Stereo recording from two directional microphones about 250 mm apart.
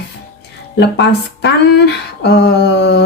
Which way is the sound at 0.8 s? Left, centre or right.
Left.